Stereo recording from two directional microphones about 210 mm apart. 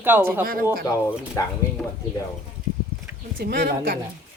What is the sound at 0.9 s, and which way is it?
Speech, 15° left (ahead or behind).